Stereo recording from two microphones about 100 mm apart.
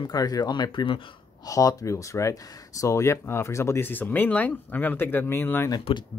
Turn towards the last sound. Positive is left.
turn(degrees=20)  # may be behind; listen again after turning